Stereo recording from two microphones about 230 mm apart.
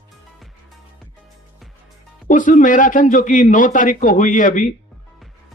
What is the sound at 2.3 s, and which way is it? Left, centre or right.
Speech, left.